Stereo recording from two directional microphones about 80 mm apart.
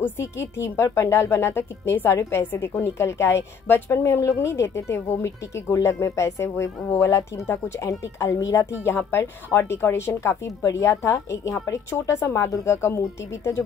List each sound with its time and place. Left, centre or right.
0.0 s a woman's voice: left